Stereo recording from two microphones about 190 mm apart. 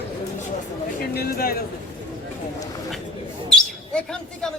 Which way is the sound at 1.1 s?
55° left (ahead or behind).